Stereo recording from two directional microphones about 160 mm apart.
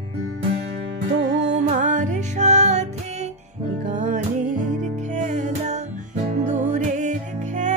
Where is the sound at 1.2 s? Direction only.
90° right.